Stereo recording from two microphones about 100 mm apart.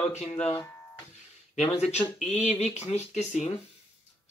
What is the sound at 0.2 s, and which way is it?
Speech, 90° left.